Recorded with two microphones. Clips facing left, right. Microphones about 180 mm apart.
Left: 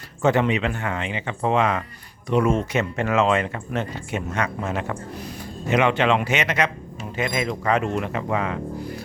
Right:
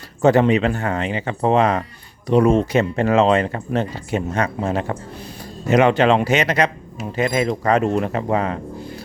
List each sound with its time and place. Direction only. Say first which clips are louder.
0.2 s speech: right 5 dB; 35° right (ahead or behind)